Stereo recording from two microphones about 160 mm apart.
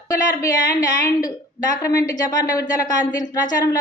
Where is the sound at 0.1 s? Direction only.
20° left (ahead or behind).